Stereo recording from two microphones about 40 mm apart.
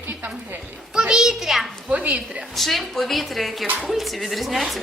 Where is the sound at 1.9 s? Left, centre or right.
Right.